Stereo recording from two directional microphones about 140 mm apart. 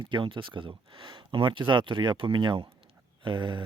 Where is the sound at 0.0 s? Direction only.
35° right (ahead or behind).